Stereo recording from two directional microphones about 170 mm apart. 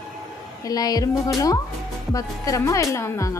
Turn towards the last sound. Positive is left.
turn(degrees=15)  # may be behind; listen again after turning